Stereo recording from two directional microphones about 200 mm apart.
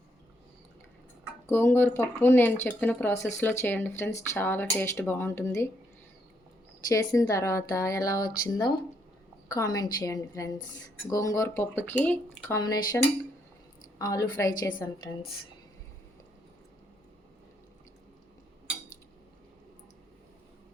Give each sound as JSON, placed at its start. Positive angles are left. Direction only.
{"t": 1.5, "sound": "speech", "side_deg": 10}
{"t": 6.8, "sound": "speech", "side_deg": 20}
{"t": 12.5, "sound": "speech", "side_deg": 20}
{"t": 14.0, "sound": "speech", "side_deg": 15}